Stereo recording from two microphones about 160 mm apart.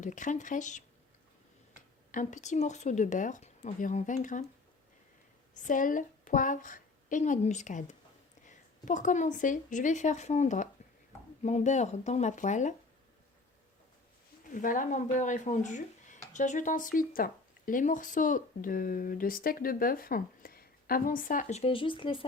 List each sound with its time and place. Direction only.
0.0 s a woman's voice: 50° left (ahead or behind)
5.5 s a woman's voice: 55° left (ahead or behind)
14.5 s speech: 55° left (ahead or behind)
21.6 s speech: 35° left (ahead or behind)